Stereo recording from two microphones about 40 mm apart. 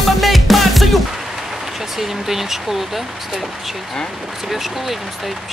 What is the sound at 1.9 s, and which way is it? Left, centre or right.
Speech, centre.